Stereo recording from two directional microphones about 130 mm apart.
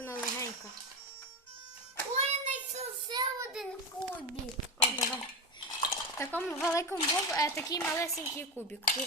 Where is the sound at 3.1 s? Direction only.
30° right (ahead or behind).